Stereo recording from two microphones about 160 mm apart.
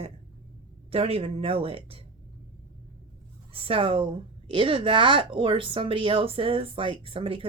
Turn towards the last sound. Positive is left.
turn(degrees=-35)  # may be behind; listen again after turning